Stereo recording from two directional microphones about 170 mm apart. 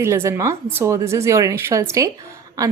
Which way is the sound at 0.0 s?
15° right (ahead or behind).